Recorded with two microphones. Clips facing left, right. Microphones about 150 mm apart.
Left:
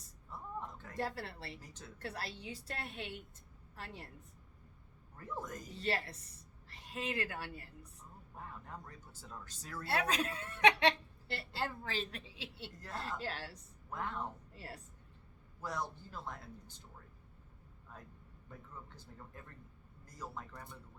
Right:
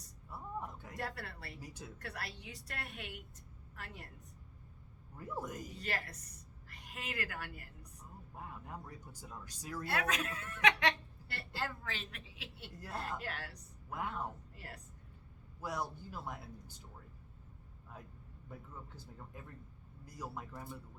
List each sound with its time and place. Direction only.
0.3 s a sound: 10° right (ahead or behind)
0.9 s a woman's voice: 30° left (ahead or behind)
1.5 s speech: 10° right (ahead or behind)
2.0 s a woman's voice: 25° left (ahead or behind)
5.1 s speech: 10° right (ahead or behind)
5.7 s a woman's voice: 30° left (ahead or behind)
8.4 s speech: 10° right (ahead or behind)
9.8 s a woman's voice: 30° left (ahead or behind)
13.9 s speech: 10° right (ahead or behind)
14.5 s a woman's voice: 30° left (ahead or behind)
15.6 s speech: 10° right (ahead or behind)
18.9 s speech: 10° right (ahead or behind)